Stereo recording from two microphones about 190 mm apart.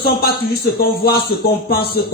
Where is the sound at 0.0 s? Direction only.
60° left (ahead or behind).